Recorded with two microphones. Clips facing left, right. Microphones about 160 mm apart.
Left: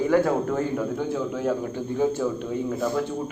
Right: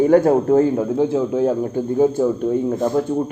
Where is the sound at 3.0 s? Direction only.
40° right (ahead or behind).